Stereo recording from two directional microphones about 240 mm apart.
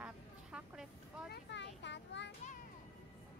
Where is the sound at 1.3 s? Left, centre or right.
Left.